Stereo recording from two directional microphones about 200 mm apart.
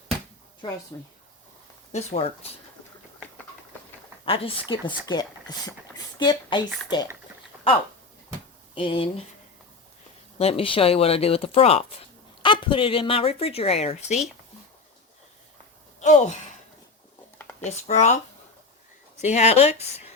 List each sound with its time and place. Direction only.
1.9 s speech: 35° left (ahead or behind)
4.3 s speech: 25° left (ahead or behind)
7.5 s a sound: 10° right (ahead or behind)
8.7 s speech: 25° left (ahead or behind)
10.3 s speech: 30° left (ahead or behind)
16.0 s a sound: 35° left (ahead or behind)
17.6 s speech: 35° left (ahead or behind)
19.2 s speech: 35° left (ahead or behind)